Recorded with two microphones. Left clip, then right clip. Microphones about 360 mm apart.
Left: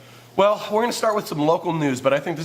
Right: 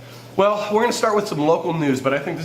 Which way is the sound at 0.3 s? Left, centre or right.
Left.